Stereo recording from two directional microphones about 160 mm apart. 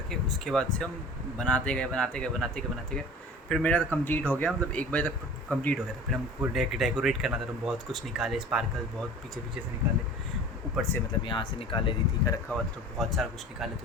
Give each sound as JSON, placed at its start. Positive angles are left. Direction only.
{"t": 0.1, "sound": "speech", "side_deg": 5}
{"t": 11.3, "sound": "speech", "side_deg": 30}
{"t": 13.0, "sound": "speech", "side_deg": 0}